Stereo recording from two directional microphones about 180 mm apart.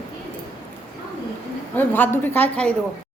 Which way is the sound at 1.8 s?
10° left (ahead or behind).